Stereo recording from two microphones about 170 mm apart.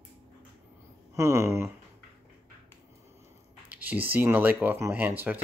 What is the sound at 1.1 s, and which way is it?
Speech, 15° right (ahead or behind).